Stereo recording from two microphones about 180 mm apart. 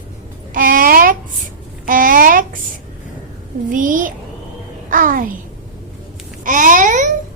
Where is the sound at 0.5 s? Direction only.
50° right (ahead or behind).